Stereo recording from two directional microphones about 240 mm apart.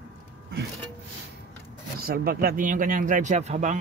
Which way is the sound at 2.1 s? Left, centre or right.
Right.